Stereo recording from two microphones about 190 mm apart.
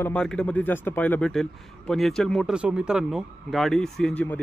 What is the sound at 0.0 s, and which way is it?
Speech, 5° left (ahead or behind).